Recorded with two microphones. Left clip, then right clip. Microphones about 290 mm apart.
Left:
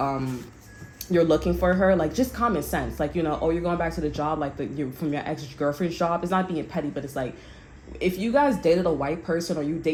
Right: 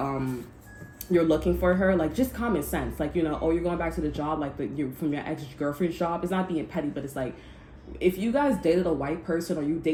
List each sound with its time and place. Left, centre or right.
1.1 s speech: left